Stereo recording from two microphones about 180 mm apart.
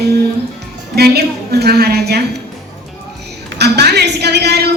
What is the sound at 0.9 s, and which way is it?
A woman's voice, 60° right (ahead or behind).